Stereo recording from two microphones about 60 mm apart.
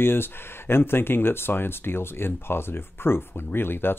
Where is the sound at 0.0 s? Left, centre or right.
Left.